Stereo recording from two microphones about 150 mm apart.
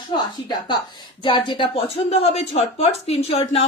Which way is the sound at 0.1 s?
30° left (ahead or behind).